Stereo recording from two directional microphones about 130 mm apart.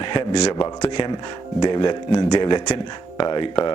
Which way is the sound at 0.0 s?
40° left (ahead or behind).